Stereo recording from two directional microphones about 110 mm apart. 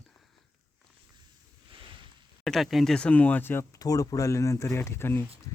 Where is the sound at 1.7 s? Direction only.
50° right (ahead or behind).